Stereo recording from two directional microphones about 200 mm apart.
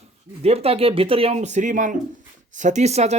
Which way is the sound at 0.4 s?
30° right (ahead or behind).